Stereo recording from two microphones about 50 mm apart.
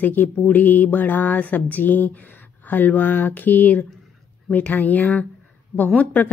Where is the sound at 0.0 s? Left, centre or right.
Left.